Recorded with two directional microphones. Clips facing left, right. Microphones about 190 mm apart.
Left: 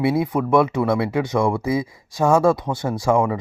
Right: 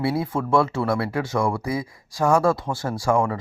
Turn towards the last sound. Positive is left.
turn(degrees=20)  # may be behind; listen again after turning